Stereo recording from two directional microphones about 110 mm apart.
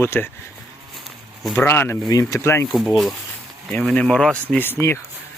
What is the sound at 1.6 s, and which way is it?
Speech, 20° left (ahead or behind).